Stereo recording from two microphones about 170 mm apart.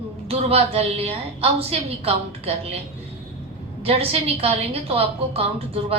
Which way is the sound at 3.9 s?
35° right (ahead or behind).